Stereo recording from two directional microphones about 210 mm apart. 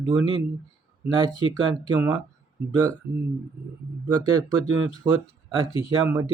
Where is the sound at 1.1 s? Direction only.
20° right (ahead or behind).